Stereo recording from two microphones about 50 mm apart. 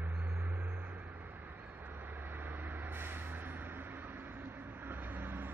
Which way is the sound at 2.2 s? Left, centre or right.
Right.